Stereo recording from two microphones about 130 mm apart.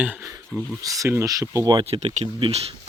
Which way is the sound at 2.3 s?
40° right (ahead or behind).